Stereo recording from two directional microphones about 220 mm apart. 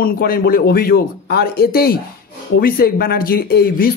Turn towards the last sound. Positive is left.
turn(degrees=45)  # may be behind; listen again after turning